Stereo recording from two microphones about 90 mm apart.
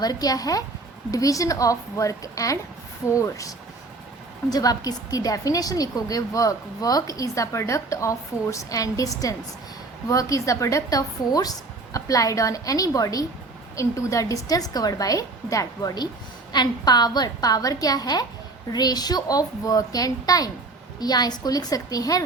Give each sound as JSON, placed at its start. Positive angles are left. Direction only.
{"t": 0.0, "sound": "a woman's voice", "side_deg": 45}
{"t": 16.5, "sound": "a woman's voice", "side_deg": 50}